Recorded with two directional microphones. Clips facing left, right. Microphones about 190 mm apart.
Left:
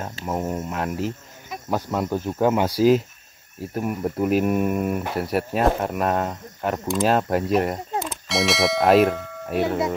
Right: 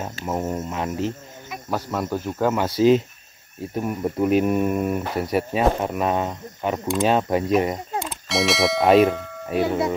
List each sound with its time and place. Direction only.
0.2 s speech: centre (ahead or behind)
1.7 s speech: 15° left (ahead or behind)
3.7 s speech: 5° left (ahead or behind)